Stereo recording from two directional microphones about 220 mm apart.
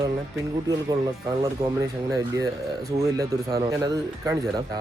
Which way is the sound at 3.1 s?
15° right (ahead or behind).